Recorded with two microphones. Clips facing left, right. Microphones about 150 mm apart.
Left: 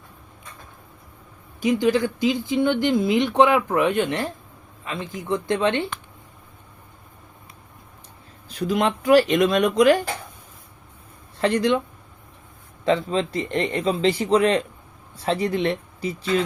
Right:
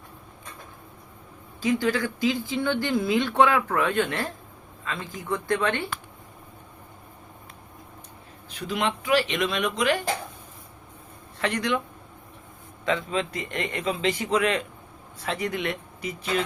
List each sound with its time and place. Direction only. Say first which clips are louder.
1.6 s speech: left 5 dB; 20° left (ahead or behind)
8.4 s speech: left 6 dB; 40° left (ahead or behind)
11.3 s speech: left 6 dB; 30° left (ahead or behind)
12.8 s a man's voice: left 5 dB; 35° left (ahead or behind)